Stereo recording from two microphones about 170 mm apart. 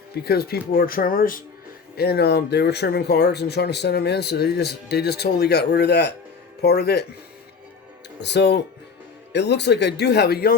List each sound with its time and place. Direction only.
0.1 s speech: 65° left (ahead or behind)
2.0 s speech: 70° left (ahead or behind)
8.2 s speech: 90° left; by 10.5 s 65° left (ahead or behind)